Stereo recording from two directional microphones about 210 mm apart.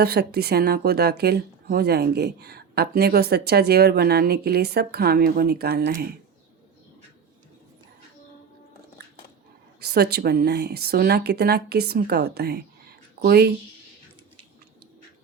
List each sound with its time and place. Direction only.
0.0 s a woman's voice: 50° right (ahead or behind)
9.8 s a woman's voice: 50° right (ahead or behind)